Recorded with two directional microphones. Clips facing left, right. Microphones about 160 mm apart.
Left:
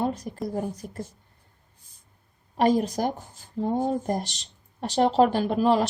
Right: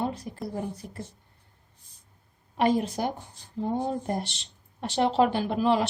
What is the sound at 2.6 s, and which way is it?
A woman's voice, 40° left (ahead or behind).